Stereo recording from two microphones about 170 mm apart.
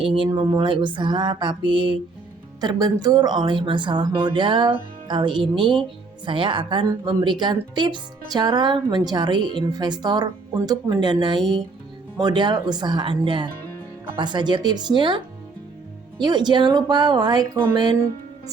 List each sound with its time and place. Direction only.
0.3 s speech: 25° right (ahead or behind)
16.2 s speech: 25° right (ahead or behind)